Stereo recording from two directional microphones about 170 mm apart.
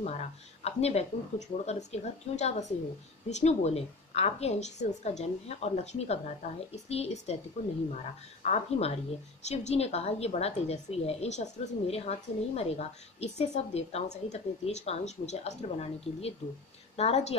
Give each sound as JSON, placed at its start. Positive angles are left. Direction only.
{"t": 0.0, "sound": "a woman's voice", "side_deg": 40}